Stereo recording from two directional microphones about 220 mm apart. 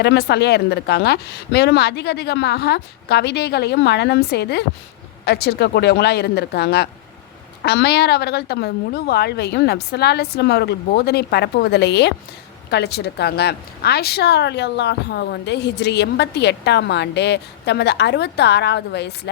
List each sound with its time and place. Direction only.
0.0 s a woman's voice: 50° left (ahead or behind)